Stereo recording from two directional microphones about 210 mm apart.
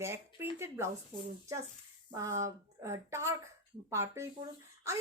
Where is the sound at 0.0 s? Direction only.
10° right (ahead or behind).